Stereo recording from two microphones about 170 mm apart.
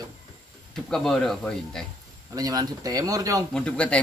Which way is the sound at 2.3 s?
20° right (ahead or behind).